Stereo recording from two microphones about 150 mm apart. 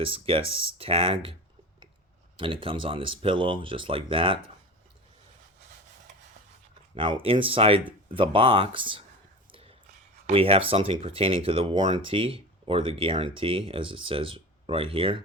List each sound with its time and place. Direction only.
0.0 s speech: 35° right (ahead or behind)
6.9 s speech: 35° right (ahead or behind)
9.5 s whispering: 40° right (ahead or behind)
10.2 s speech: 40° right (ahead or behind)